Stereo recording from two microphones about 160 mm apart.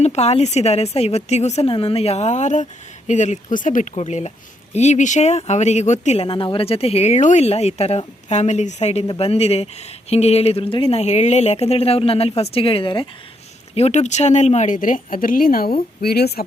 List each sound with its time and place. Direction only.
0.0 s a woman's voice: 45° left (ahead or behind)
6.2 s speech: 30° left (ahead or behind)
13.7 s speech: 45° left (ahead or behind); by 16.4 s 80° left